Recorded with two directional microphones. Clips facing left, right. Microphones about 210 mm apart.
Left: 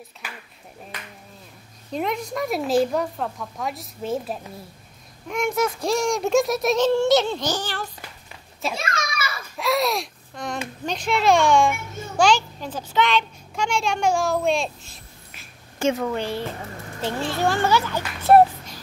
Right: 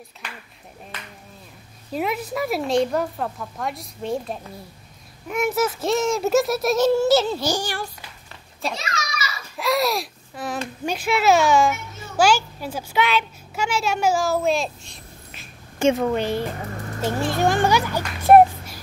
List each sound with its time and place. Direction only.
1.9 s a child's voice: 5° right (ahead or behind)
8.7 s children playing: 55° left (ahead or behind)
9.6 s babbling: centre (ahead or behind)
10.9 s a child's voice: 5° right (ahead or behind)
15.8 s a woman's voice: 20° right (ahead or behind)